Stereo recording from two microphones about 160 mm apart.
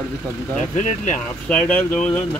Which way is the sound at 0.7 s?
50° left (ahead or behind).